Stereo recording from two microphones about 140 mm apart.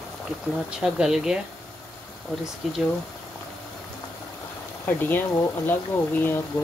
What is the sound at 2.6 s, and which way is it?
Speech, centre (ahead or behind).